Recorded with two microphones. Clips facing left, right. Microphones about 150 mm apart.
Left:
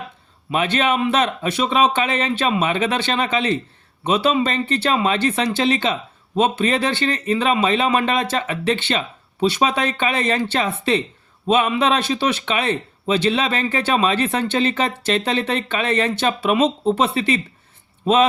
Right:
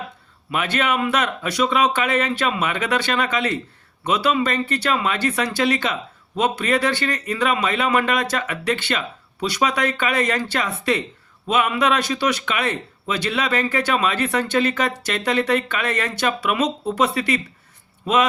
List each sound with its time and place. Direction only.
0.5 s speech: 25° left (ahead or behind)